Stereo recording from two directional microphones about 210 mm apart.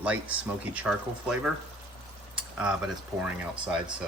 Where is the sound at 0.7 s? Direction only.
5° right (ahead or behind).